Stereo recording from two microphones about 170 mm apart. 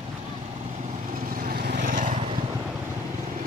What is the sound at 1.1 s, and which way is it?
Vehicle, 55° right (ahead or behind).